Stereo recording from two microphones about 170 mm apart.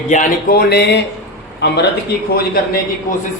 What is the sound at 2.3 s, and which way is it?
Speech, 60° left (ahead or behind).